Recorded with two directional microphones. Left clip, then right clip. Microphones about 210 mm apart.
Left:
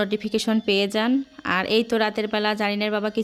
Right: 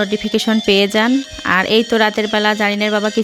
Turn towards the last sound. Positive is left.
turn(degrees=-25)  # may be behind; listen again after turning